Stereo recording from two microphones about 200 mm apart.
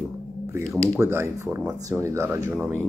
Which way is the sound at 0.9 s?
10° right (ahead or behind).